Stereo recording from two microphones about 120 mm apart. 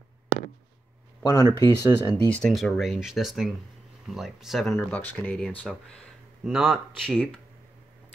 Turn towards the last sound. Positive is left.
turn(degrees=0)  # may be behind; listen again after turning